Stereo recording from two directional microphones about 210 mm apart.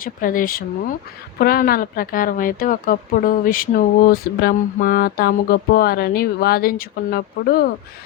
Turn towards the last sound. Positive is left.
turn(degrees=45)  # may be behind; listen again after turning